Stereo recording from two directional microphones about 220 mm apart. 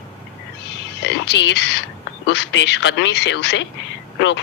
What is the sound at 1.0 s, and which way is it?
A woman's voice, 55° left (ahead or behind).